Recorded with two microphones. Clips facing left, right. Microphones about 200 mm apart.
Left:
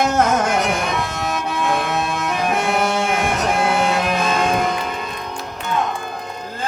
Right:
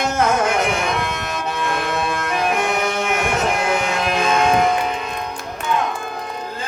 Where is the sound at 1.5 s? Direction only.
55° left (ahead or behind).